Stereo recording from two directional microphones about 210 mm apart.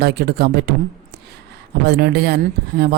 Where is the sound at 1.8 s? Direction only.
50° right (ahead or behind).